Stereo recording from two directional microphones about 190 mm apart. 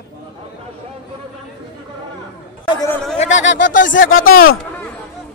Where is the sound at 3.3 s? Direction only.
75° left (ahead or behind).